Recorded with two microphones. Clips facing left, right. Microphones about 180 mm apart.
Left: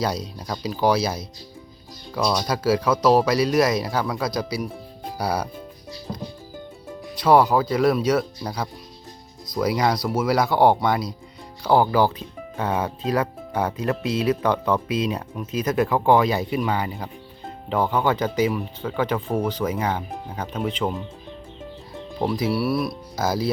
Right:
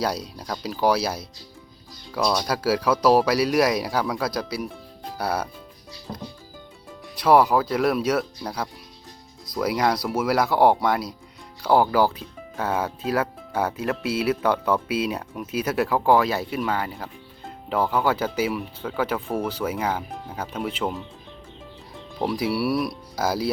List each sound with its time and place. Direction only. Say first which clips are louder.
0.0 s speech: left 1 dB; 5° right (ahead or behind)
7.2 s speech: left 1 dB; 5° right (ahead or behind)
9.6 s speech: left 1 dB; 5° right (ahead or behind)
22.2 s speech: left 1 dB; 10° right (ahead or behind)